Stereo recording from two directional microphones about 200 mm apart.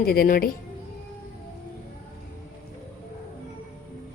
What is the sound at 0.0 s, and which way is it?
Speech, 50° left (ahead or behind).